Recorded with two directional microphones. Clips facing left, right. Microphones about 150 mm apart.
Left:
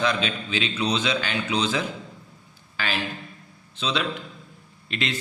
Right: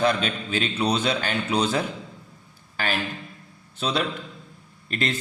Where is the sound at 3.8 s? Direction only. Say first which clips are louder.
Right 1 dB; 50° right (ahead or behind).